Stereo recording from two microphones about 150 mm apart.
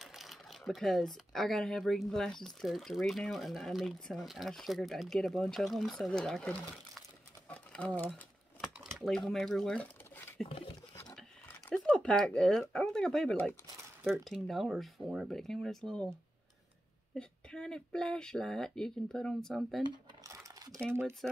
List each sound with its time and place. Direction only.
0.0 s speech: centre (ahead or behind)
11.7 s speech: 5° left (ahead or behind)
19.8 s a sound: 25° right (ahead or behind)
21.2 s speech: centre (ahead or behind)